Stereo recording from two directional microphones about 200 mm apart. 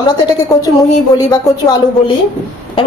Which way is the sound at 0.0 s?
20° left (ahead or behind).